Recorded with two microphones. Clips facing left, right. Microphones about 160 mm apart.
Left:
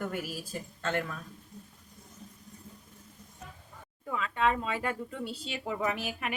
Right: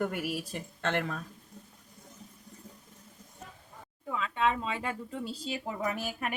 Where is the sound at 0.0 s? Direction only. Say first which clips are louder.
Right 3 dB; 65° right (ahead or behind).